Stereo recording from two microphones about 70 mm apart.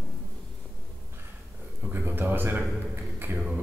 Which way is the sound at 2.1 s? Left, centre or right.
Right.